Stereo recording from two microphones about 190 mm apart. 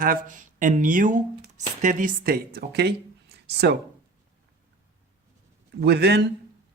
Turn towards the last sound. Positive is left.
turn(degrees=-60)  # may be behind; listen again after turning